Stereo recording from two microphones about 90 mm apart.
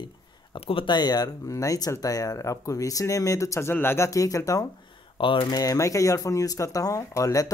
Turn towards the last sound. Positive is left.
turn(degrees=35)  # may be behind; listen again after turning